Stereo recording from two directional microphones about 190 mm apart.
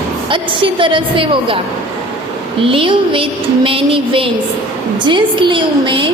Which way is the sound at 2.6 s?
30° right (ahead or behind).